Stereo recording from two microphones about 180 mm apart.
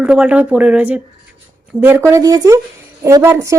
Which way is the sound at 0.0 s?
5° right (ahead or behind).